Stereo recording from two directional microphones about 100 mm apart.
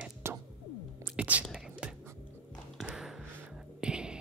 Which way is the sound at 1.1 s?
15° right (ahead or behind).